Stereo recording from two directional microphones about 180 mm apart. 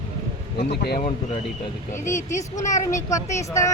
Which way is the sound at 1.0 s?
35° left (ahead or behind).